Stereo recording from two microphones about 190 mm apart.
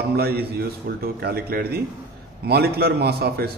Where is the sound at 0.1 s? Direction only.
55° right (ahead or behind).